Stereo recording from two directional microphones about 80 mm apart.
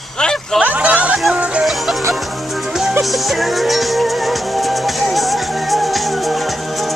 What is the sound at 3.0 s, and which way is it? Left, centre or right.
Music, centre.